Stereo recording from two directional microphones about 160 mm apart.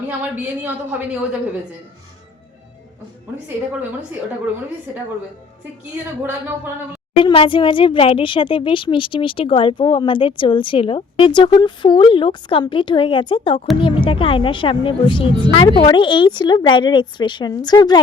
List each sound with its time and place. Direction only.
0.2 s a woman's voice: 10° right (ahead or behind)
7.2 s a woman's voice: 30° left (ahead or behind)